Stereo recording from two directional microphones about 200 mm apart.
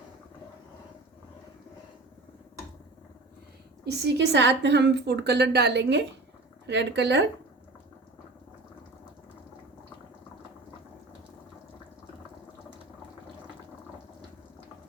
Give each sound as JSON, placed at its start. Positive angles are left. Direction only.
{"t": 3.8, "sound": "a woman's voice", "side_deg": -60}